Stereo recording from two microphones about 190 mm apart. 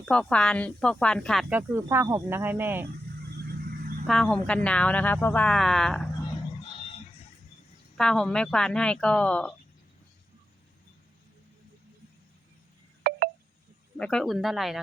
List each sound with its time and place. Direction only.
0.0 s speech: 5° left (ahead or behind); by 2.8 s 10° right (ahead or behind)
3.7 s vehicle: 50° right (ahead or behind)
4.0 s speech: 5° left (ahead or behind)
7.9 s speech: 5° left (ahead or behind)
13.0 s telephone dialing: 55° right (ahead or behind)
13.9 s speech: 5° left (ahead or behind)